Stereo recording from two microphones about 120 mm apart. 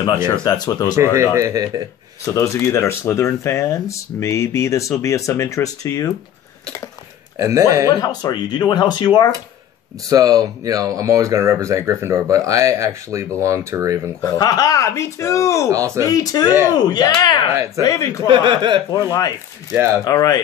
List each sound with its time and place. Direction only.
0.7 s speech: 25° left (ahead or behind)
1.1 s speech: 25° right (ahead or behind)
2.3 s speech: 25° left (ahead or behind)
7.3 s speech: 25° right (ahead or behind)
8.0 s speech: 35° left (ahead or behind)
10.0 s speech: 30° right (ahead or behind)
14.2 s speech: 30° left (ahead or behind)
15.7 s speech: 25° right (ahead or behind)
16.1 s speech: 30° left (ahead or behind)
18.2 s speech: 45° right (ahead or behind)
18.9 s speech: 30° left (ahead or behind)
19.7 s speech: 20° right (ahead or behind)
20.1 s speech: 35° left (ahead or behind)